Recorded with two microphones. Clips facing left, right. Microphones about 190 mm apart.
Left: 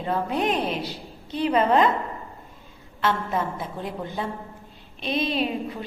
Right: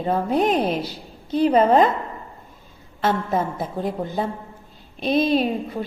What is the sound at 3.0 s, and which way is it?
A woman's voice, 40° right (ahead or behind).